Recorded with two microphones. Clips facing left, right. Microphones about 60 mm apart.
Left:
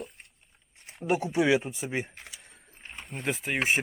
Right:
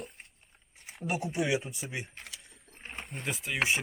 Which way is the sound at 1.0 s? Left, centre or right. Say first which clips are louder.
Left 6 dB; left.